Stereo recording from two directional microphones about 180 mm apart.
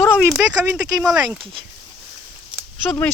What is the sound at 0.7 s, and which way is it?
Speech, 20° right (ahead or behind).